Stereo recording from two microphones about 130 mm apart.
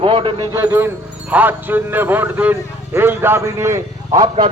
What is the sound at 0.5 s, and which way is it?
A man's voice, 20° right (ahead or behind).